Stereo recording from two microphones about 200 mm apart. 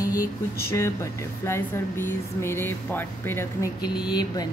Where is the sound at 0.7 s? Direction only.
15° left (ahead or behind).